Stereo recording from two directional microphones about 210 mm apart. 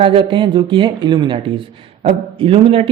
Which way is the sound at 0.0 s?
25° right (ahead or behind).